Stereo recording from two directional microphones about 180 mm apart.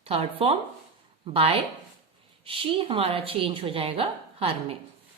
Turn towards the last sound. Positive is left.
turn(degrees=-30)  # may be behind; listen again after turning